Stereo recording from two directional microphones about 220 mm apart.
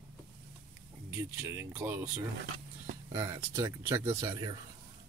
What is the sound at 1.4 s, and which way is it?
Speech, 10° right (ahead or behind).